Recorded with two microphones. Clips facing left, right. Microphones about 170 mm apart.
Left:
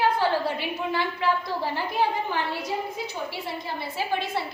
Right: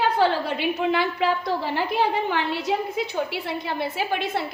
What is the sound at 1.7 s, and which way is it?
A woman's voice, 70° right (ahead or behind).